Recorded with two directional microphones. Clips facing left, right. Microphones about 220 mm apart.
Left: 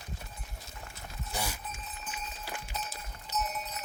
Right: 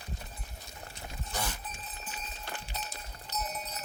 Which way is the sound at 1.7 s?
35° right (ahead or behind).